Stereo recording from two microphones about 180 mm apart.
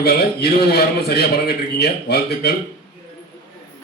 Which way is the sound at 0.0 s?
60° left (ahead or behind).